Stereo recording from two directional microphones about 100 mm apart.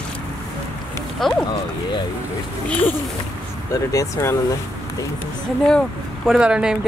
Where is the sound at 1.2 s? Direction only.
Centre (ahead or behind).